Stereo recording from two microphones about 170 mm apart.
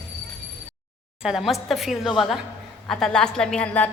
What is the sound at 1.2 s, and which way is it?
A woman's voice, centre (ahead or behind).